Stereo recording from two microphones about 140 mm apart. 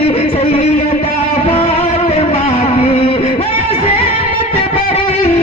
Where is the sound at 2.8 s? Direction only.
45° left (ahead or behind).